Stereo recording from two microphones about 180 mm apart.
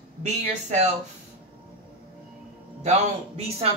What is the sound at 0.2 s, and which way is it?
Speech, 40° right (ahead or behind).